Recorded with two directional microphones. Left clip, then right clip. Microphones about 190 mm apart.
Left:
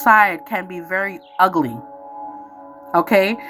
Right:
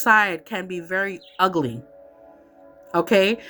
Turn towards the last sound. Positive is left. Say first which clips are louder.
# left 3 dB
turn(degrees=-30)  # may be behind; listen again after turning